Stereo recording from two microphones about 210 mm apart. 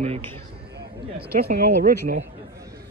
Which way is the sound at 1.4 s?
45° right (ahead or behind).